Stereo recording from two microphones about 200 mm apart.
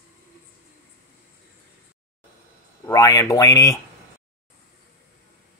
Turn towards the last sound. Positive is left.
turn(degrees=15)  # may be behind; listen again after turning